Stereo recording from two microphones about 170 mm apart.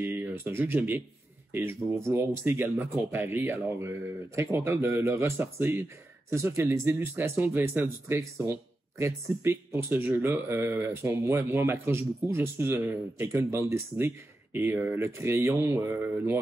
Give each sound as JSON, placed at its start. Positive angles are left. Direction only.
{"t": 0.0, "sound": "speech", "side_deg": -10}